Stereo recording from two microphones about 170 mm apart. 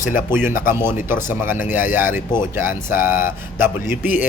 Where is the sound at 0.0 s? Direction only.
50° left (ahead or behind).